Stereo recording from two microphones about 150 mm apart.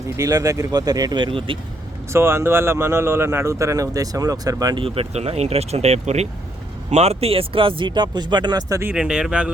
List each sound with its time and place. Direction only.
0.2 s speech: 25° right (ahead or behind)
2.1 s speech: 15° right (ahead or behind)
4.8 s speech: 40° right (ahead or behind)
8.8 s speech: 10° right (ahead or behind)